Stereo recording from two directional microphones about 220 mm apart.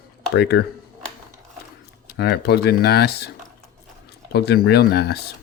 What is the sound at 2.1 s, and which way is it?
Speech, 45° left (ahead or behind).